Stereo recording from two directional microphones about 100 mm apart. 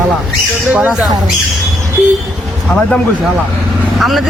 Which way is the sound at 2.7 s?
15° left (ahead or behind).